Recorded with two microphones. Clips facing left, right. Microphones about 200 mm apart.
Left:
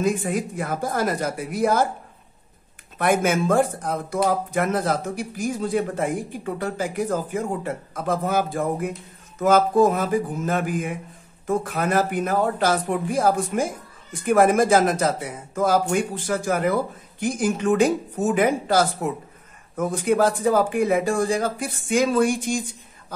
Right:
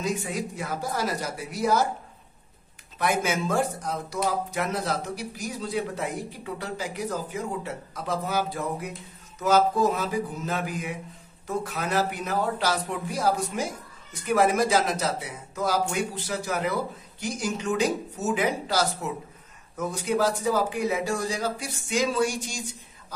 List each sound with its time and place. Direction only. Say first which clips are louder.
0.0 s speech: left 6 dB; 55° left (ahead or behind)
3.0 s speech: left 6 dB; 50° left (ahead or behind)